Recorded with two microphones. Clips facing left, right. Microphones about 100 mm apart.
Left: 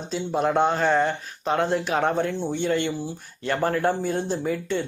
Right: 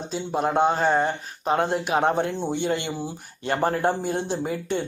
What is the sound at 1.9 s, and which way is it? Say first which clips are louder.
Speech: right 1 dB; 20° right (ahead or behind).